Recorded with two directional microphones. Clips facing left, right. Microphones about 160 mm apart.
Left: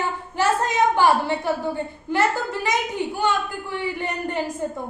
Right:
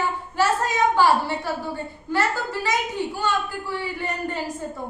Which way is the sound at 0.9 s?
20° left (ahead or behind).